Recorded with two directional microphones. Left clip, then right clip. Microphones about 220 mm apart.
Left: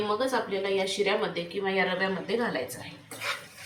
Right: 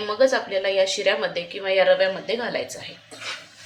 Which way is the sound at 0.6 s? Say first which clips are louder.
Right 7 dB; 55° right (ahead or behind).